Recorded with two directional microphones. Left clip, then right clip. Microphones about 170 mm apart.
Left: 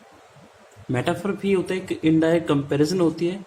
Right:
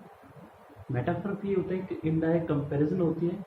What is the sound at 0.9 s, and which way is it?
Speech, 75° left (ahead or behind).